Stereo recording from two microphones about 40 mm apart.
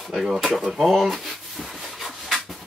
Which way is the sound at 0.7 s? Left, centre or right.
Centre.